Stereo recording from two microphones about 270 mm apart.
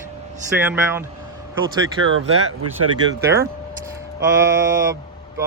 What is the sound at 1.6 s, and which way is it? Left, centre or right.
Speech, right.